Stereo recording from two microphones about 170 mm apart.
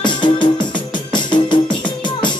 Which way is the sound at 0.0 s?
25° left (ahead or behind).